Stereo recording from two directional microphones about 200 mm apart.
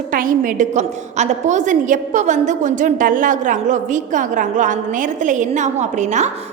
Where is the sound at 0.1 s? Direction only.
45° right (ahead or behind).